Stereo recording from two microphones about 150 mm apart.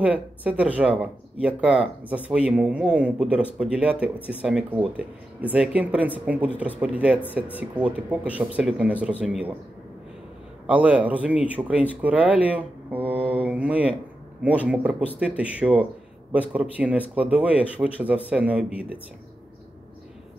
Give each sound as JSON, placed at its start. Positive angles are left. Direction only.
{"t": 0.0, "sound": "speech", "side_deg": -10}
{"t": 10.7, "sound": "speech", "side_deg": -10}